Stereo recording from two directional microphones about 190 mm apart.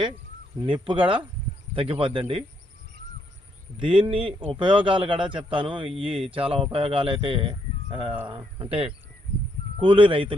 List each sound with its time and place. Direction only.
0.6 s a man's voice: 25° right (ahead or behind)
3.8 s a man's voice: 25° right (ahead or behind)